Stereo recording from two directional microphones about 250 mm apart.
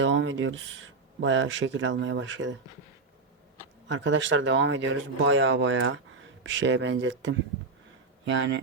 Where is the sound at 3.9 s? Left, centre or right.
Right.